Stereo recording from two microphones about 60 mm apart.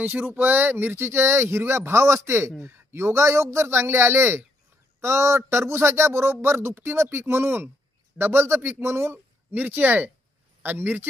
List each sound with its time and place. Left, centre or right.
0.0 s a man's voice: right